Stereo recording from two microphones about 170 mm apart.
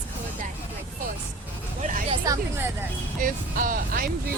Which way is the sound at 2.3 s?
20° right (ahead or behind).